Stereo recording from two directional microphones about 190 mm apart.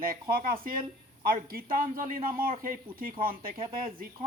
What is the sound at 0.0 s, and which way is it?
Speech, 50° right (ahead or behind).